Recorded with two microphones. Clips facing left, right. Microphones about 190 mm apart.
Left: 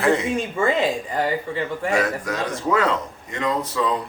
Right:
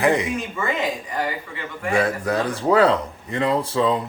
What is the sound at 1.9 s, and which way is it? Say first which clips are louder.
Speech: right 4 dB; 30° right (ahead or behind).